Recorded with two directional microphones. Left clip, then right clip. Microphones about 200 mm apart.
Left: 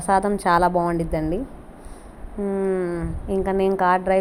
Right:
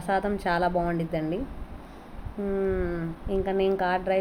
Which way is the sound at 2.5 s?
15° left (ahead or behind).